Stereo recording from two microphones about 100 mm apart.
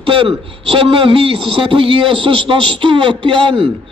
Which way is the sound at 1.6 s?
65° right (ahead or behind).